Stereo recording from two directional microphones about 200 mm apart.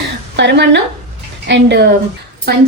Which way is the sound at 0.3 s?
60° right (ahead or behind).